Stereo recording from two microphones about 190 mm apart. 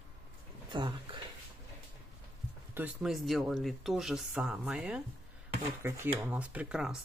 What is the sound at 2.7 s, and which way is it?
Speech, 10° right (ahead or behind).